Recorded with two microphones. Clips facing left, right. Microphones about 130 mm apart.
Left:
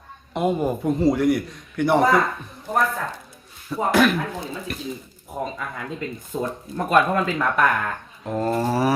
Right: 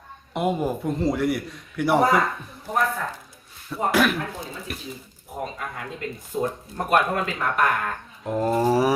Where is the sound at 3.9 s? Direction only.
5° right (ahead or behind).